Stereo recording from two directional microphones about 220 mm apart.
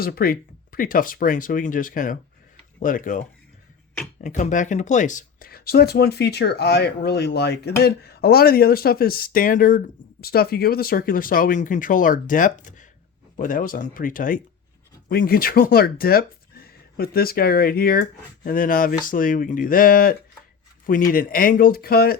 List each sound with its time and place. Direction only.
0.0 s speech: 45° left (ahead or behind)